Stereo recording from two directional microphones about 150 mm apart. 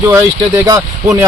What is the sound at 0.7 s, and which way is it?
Speech, 20° right (ahead or behind).